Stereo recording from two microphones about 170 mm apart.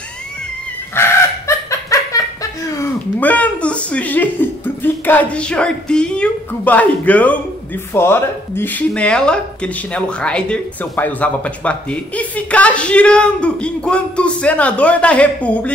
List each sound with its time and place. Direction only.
1.0 s chicken: 15° left (ahead or behind)
1.7 s laughter: 20° left (ahead or behind)
2.7 s speech: 15° left (ahead or behind)